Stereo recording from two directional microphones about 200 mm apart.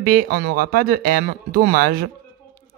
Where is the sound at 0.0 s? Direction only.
45° right (ahead or behind).